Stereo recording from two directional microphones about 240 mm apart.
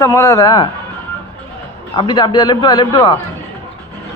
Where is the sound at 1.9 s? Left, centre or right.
Centre.